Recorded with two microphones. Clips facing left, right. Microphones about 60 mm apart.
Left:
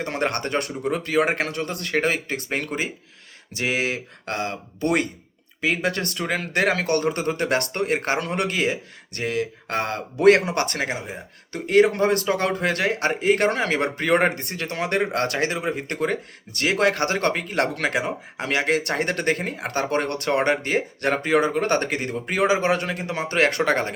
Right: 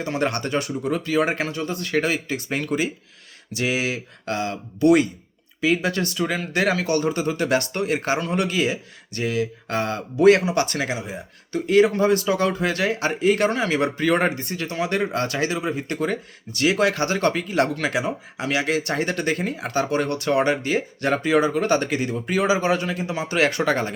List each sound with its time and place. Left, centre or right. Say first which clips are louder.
0.0 s speech: right 1 dB; left
2.6 s speech: right 4 dB; left